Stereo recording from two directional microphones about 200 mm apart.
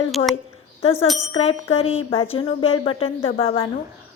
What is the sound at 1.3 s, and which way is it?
Speech, 30° left (ahead or behind).